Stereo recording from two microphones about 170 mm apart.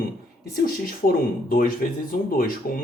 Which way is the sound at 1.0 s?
55° left (ahead or behind).